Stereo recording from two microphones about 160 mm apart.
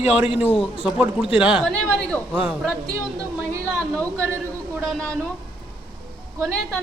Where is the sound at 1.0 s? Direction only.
5° right (ahead or behind).